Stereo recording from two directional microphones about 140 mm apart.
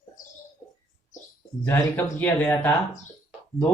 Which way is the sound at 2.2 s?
15° left (ahead or behind).